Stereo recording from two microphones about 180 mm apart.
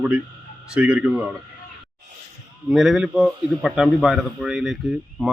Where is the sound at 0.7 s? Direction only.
5° right (ahead or behind).